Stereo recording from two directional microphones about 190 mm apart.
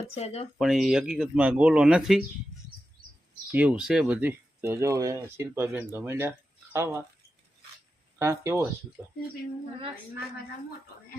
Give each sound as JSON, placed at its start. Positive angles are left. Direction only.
{"t": 0.1, "sound": "speech", "side_deg": 35}
{"t": 0.6, "sound": "speech", "side_deg": 0}
{"t": 3.5, "sound": "speech", "side_deg": -10}
{"t": 8.2, "sound": "speech", "side_deg": -15}